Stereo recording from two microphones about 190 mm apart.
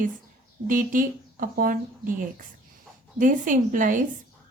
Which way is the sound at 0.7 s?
45° right (ahead or behind).